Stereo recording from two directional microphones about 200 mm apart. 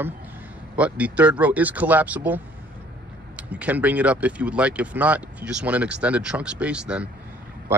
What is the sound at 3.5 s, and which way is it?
A man's voice, 5° right (ahead or behind).